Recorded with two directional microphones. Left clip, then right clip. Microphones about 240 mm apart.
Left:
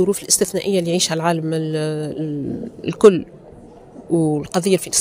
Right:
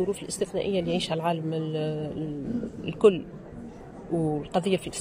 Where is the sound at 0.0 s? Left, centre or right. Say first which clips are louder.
Left 11 dB; left.